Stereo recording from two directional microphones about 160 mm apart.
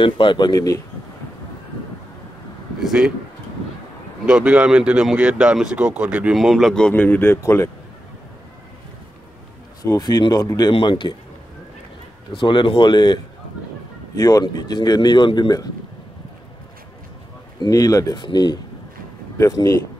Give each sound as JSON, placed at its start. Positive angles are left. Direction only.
{"t": 0.0, "sound": "a man's voice", "side_deg": 30}
{"t": 2.8, "sound": "speech", "side_deg": -5}
{"t": 4.3, "sound": "speech", "side_deg": -5}
{"t": 9.8, "sound": "a man's voice", "side_deg": 25}
{"t": 12.4, "sound": "a man's voice", "side_deg": 30}
{"t": 17.6, "sound": "a man's voice", "side_deg": 20}